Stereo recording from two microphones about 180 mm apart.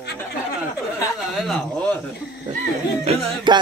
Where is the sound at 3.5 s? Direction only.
25° right (ahead or behind).